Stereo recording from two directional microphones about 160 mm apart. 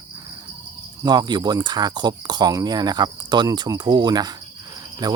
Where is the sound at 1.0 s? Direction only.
25° right (ahead or behind).